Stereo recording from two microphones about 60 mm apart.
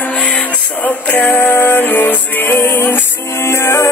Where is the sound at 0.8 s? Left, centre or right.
Left.